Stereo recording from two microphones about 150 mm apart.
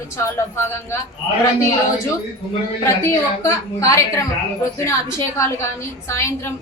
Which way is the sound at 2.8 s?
20° left (ahead or behind).